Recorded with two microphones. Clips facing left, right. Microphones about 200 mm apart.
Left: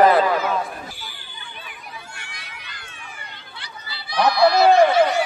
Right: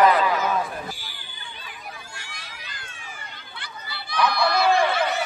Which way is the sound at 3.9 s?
55° right (ahead or behind).